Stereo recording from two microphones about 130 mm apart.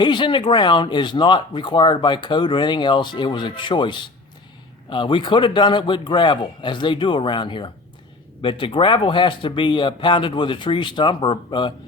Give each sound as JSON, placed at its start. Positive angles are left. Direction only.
{"t": 0.0, "sound": "speech", "side_deg": 35}